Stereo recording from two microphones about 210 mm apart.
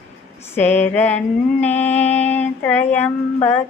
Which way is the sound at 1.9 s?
30° left (ahead or behind).